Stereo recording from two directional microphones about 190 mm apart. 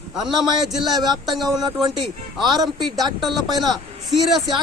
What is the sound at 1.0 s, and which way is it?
Speech, 20° right (ahead or behind).